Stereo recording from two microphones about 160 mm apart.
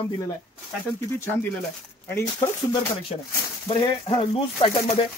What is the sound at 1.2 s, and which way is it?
Speech, 15° left (ahead or behind).